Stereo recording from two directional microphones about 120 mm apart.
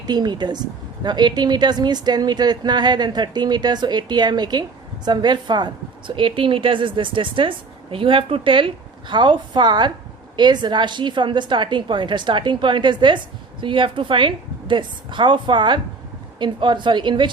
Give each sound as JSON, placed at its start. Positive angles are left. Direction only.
{"t": 0.0, "sound": "a woman's voice", "side_deg": -35}